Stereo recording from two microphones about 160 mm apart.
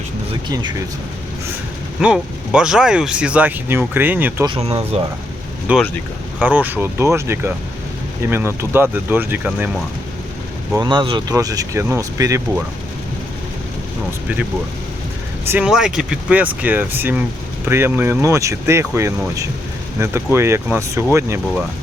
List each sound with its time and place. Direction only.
0.4 s speech: 25° right (ahead or behind)
2.0 s speech: 5° right (ahead or behind)
4.4 s speech: 35° right (ahead or behind)
5.7 s speech: 10° right (ahead or behind)
10.8 s speech: 30° right (ahead or behind)
11.3 s speech: 20° right (ahead or behind)
15.4 s speech: 10° right (ahead or behind)